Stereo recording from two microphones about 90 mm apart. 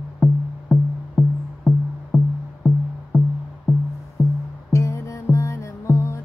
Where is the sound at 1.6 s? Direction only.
5° left (ahead or behind).